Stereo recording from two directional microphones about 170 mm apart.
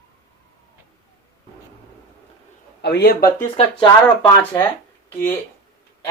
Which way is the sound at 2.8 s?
75° left (ahead or behind).